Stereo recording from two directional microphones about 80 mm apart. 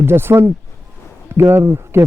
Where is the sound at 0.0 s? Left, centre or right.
Right.